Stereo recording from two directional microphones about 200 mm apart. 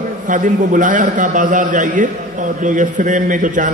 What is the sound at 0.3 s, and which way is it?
A man's voice, 40° right (ahead or behind).